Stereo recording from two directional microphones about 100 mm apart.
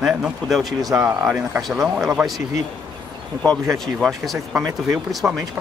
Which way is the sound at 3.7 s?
5° left (ahead or behind).